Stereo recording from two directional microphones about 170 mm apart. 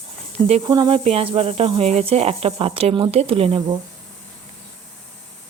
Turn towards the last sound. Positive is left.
turn(degrees=-35)  # may be behind; listen again after turning